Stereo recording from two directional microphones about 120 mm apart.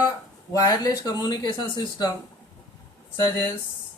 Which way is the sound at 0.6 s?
30° left (ahead or behind).